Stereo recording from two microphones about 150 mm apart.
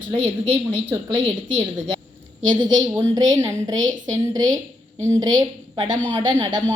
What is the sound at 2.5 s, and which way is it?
A woman's voice, 30° right (ahead or behind).